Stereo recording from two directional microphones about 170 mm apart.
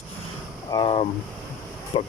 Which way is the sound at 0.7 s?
30° left (ahead or behind).